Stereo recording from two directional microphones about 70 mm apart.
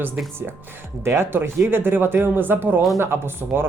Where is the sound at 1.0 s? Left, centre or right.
Right.